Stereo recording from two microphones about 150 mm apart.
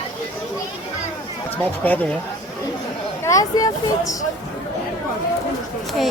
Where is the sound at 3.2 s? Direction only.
20° left (ahead or behind).